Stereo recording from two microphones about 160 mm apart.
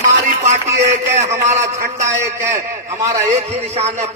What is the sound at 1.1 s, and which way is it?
Speech, 45° right (ahead or behind).